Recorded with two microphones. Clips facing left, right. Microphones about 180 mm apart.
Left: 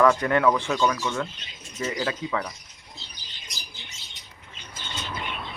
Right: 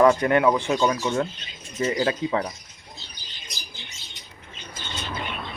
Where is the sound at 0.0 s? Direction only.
20° right (ahead or behind).